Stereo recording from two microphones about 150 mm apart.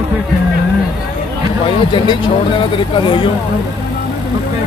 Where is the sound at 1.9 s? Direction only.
35° left (ahead or behind).